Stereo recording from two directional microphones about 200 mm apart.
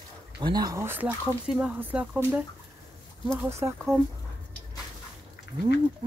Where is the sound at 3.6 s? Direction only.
10° right (ahead or behind).